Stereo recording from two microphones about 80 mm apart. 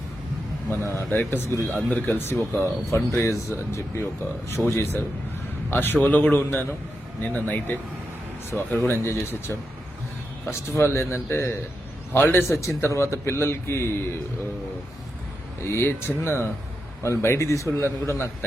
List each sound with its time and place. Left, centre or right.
0.9 s speech: left
12.5 s speech: left
15.6 s speech: left